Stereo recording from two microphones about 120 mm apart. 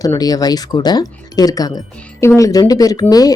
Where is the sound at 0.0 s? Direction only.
30° left (ahead or behind).